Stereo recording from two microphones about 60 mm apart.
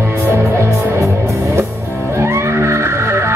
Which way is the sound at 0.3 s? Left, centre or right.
Right.